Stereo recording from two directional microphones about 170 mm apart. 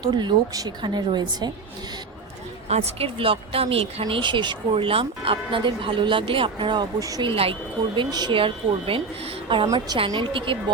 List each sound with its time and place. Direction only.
0.0 s speech: 25° right (ahead or behind)
2.6 s speech: 40° right (ahead or behind)